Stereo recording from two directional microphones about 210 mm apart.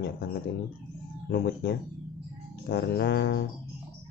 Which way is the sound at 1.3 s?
50° left (ahead or behind).